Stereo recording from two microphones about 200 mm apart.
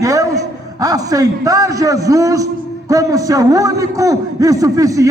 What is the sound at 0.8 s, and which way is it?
A man's voice, 15° right (ahead or behind).